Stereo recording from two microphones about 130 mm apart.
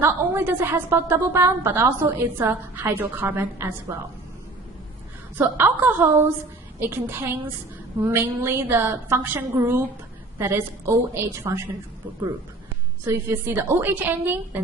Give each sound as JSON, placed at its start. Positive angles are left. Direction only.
{"t": 0.0, "sound": "a woman's voice", "side_deg": -15}
{"t": 5.4, "sound": "a woman's voice", "side_deg": -15}
{"t": 13.1, "sound": "a woman's voice", "side_deg": -15}